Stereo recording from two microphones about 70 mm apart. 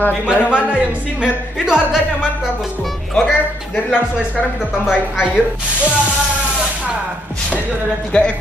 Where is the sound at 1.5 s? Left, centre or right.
Centre.